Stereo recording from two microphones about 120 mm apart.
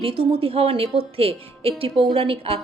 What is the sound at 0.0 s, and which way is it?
Speech, 50° right (ahead or behind).